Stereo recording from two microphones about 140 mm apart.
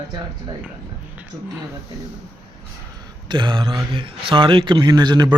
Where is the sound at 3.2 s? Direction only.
35° right (ahead or behind).